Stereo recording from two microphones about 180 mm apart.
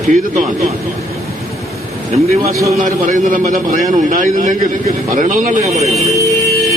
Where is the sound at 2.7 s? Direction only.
45° right (ahead or behind).